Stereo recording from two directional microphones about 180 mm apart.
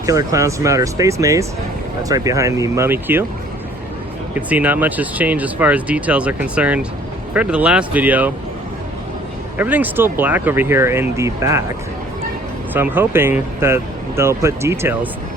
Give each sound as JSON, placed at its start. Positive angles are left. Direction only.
{"t": 0.0, "sound": "speech", "side_deg": -20}
{"t": 4.4, "sound": "speech", "side_deg": -10}
{"t": 9.6, "sound": "speech", "side_deg": -10}
{"t": 12.7, "sound": "speech", "side_deg": -10}